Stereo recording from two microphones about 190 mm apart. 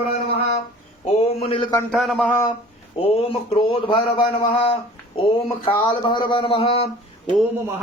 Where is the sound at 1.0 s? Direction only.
30° left (ahead or behind).